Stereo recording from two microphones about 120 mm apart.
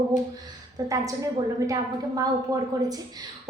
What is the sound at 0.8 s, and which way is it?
A woman's voice, 30° right (ahead or behind).